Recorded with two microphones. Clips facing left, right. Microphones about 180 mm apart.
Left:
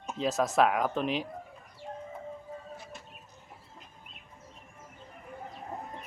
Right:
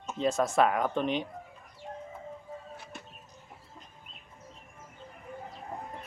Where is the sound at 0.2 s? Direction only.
Centre (ahead or behind).